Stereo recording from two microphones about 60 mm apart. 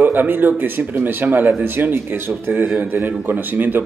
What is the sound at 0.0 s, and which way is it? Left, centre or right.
A man's voice, right.